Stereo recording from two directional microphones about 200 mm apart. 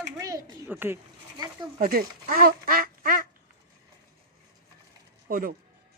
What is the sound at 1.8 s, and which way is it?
Speech, 50° right (ahead or behind).